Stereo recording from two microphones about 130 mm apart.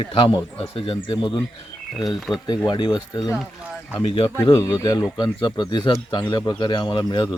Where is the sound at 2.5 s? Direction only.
35° left (ahead or behind).